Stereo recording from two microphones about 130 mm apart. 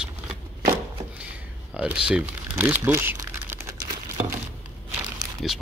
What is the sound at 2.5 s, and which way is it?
Crumpling, 20° right (ahead or behind).